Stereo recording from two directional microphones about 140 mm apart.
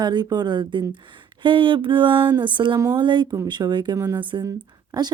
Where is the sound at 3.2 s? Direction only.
25° right (ahead or behind).